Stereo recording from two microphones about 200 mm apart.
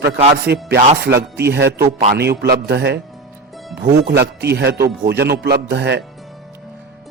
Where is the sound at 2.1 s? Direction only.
55° right (ahead or behind).